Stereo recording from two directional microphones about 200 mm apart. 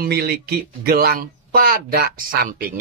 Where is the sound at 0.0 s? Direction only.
50° right (ahead or behind).